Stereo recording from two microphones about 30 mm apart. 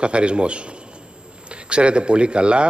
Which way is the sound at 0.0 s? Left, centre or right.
Right.